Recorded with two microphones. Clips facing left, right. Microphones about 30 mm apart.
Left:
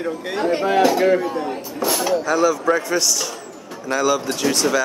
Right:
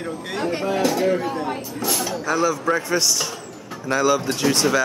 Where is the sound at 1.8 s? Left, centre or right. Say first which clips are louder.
Left 7 dB; centre.